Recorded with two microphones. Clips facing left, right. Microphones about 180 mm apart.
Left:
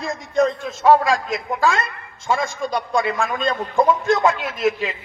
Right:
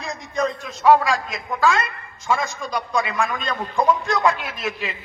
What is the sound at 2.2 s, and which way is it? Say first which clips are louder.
A man's voice: left 2 dB; 30° left (ahead or behind).